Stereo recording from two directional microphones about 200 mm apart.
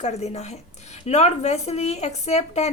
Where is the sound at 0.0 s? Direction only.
35° left (ahead or behind).